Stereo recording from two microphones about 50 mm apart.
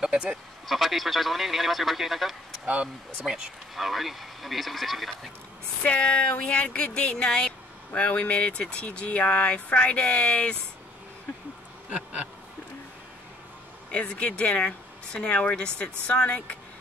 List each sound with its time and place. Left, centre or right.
0.0 s speech: centre
0.7 s a man's voice: centre
2.6 s speech: right
3.7 s a man's voice: centre
5.9 s speech: left
11.9 s insect: right
13.9 s speech: left